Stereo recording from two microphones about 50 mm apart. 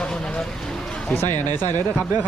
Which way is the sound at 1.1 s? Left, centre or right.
Left.